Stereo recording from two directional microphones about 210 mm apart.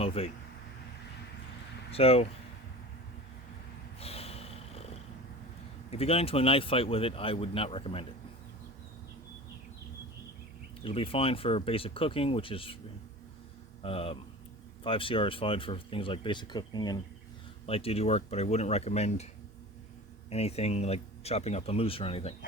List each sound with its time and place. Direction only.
0.0 s speech: 25° left (ahead or behind)
1.9 s speech: 30° left (ahead or behind)
4.0 s vehicle: 30° left (ahead or behind)
5.9 s speech: 30° left (ahead or behind)
10.8 s speech: 25° left (ahead or behind)
13.8 s speech: 25° left (ahead or behind)
20.3 s speech: 30° left (ahead or behind)